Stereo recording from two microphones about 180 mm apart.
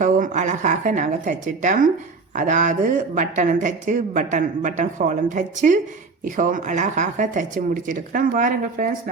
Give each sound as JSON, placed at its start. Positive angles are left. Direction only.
{"t": 0.0, "sound": "speech", "side_deg": -45}